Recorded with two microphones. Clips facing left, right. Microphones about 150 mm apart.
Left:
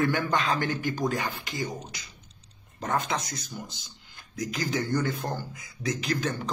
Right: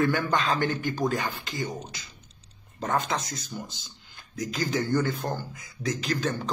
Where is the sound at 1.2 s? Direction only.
25° left (ahead or behind).